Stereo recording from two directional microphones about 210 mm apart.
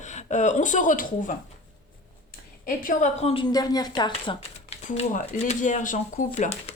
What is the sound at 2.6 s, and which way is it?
A woman's voice, 40° left (ahead or behind).